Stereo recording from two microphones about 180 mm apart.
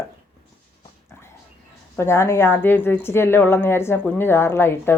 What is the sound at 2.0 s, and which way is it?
A woman's voice, 15° left (ahead or behind).